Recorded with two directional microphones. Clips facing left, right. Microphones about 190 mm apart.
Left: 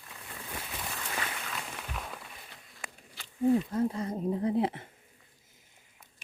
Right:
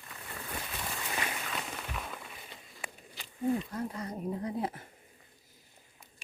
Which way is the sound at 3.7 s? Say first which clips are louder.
Left 7 dB; 25° left (ahead or behind).